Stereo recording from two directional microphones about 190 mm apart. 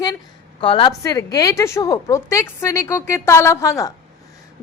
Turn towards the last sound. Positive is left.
turn(degrees=15)  # may be behind; listen again after turning